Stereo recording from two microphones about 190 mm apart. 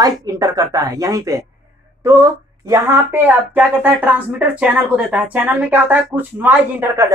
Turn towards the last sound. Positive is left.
turn(degrees=-10)  # may be behind; listen again after turning